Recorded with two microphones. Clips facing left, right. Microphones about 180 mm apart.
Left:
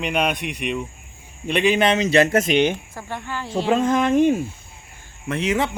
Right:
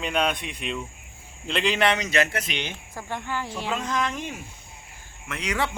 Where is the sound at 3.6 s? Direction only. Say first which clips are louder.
Left 11 dB; 50° left (ahead or behind).